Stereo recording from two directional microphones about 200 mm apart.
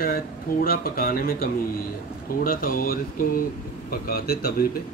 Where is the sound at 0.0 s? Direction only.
45° left (ahead or behind).